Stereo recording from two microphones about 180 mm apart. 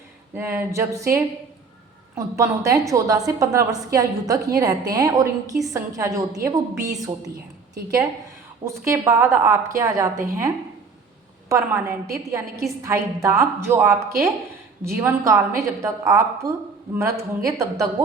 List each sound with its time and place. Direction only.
0.3 s a woman's voice: 10° right (ahead or behind)
8.6 s a woman's voice: 15° right (ahead or behind)
11.4 s a woman's voice: 15° right (ahead or behind)